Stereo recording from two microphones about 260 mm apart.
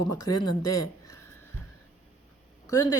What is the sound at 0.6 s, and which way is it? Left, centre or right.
Speech, left.